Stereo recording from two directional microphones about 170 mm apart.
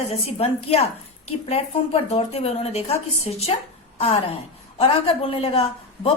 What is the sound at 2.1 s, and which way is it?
A woman's voice, 35° left (ahead or behind).